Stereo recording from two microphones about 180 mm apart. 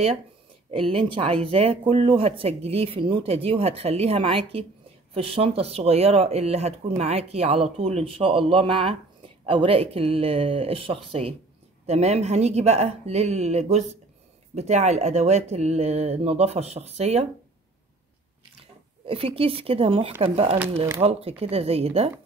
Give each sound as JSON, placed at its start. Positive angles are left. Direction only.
{"t": 0.9, "sound": "speech", "side_deg": -30}
{"t": 19.0, "sound": "speech", "side_deg": -30}